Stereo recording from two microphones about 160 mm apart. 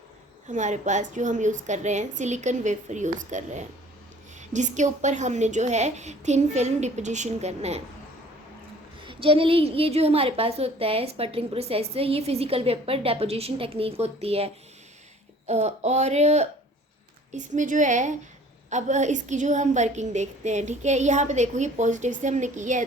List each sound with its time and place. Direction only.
0.4 s a woman's voice: 50° right (ahead or behind)
9.0 s a woman's voice: 35° right (ahead or behind); by 22.8 s 50° right (ahead or behind)